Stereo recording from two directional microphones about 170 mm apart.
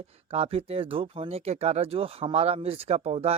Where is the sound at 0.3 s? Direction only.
35° right (ahead or behind).